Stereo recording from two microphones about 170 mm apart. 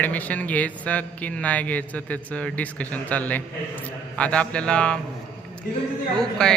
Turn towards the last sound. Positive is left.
turn(degrees=5)  # may be behind; listen again after turning